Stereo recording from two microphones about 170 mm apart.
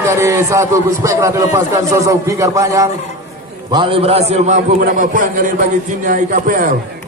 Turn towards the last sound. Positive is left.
turn(degrees=-50)  # may be behind; listen again after turning